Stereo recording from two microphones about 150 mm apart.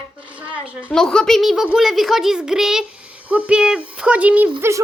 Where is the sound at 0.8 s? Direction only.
5° left (ahead or behind).